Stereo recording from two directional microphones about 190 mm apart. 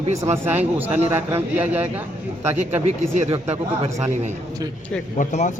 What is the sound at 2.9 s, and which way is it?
Speech, 35° right (ahead or behind).